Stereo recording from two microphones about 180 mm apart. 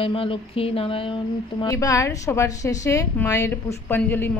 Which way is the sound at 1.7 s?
20° left (ahead or behind).